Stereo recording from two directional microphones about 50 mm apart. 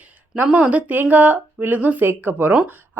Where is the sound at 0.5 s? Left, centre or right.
Right.